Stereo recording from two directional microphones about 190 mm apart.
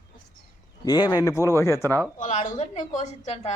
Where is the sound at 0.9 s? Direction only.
20° left (ahead or behind).